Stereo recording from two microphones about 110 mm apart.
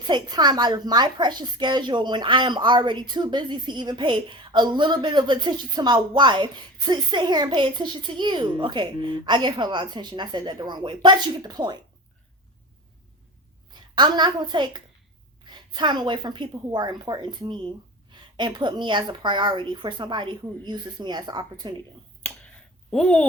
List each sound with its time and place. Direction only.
0.1 s a woman's voice: 40° right (ahead or behind)
13.9 s a woman's voice: 45° right (ahead or behind)
22.9 s speech: 5° left (ahead or behind)